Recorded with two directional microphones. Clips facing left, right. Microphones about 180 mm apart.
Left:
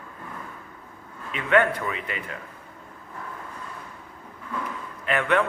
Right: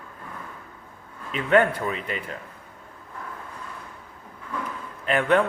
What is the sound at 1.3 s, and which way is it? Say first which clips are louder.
A man's voice: right 2 dB; 35° right (ahead or behind).